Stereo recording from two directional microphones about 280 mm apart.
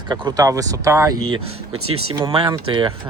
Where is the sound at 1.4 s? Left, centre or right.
Right.